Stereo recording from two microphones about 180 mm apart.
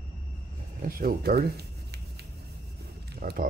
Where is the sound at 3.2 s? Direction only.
60° right (ahead or behind).